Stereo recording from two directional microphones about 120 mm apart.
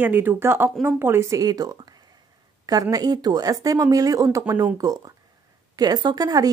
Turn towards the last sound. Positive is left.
turn(degrees=-30)  # may be behind; listen again after turning